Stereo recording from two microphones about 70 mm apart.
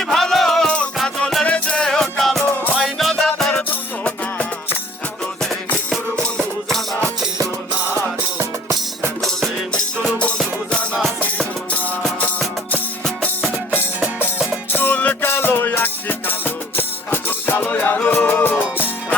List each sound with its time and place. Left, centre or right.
0.0 s music: centre
1.5 s music: centre
3.5 s music: centre
6.2 s music: centre
9.2 s music: centre; by 11.8 s left
14.7 s music: left